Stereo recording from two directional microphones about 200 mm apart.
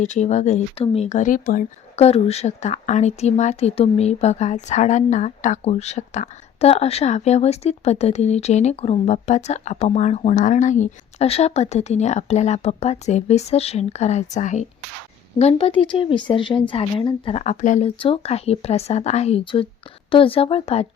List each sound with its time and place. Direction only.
0.0 s speech: 35° left (ahead or behind)
2.0 s speech: 30° left (ahead or behind)